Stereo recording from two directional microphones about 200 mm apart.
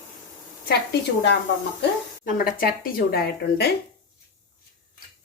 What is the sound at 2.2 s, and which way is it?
A woman's voice, 45° left (ahead or behind).